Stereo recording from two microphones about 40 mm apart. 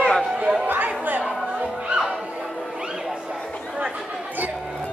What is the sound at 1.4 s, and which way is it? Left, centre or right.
Music, right.